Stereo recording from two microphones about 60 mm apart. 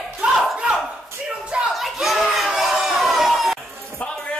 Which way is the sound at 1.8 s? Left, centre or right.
Centre.